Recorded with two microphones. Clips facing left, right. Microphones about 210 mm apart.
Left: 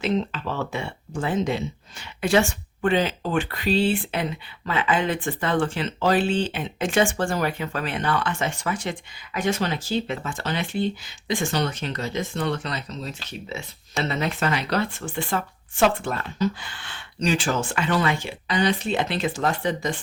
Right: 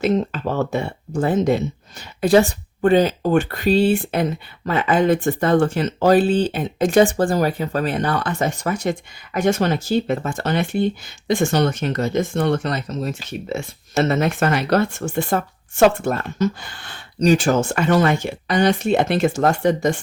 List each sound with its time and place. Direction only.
0.0 s speech: 45° right (ahead or behind)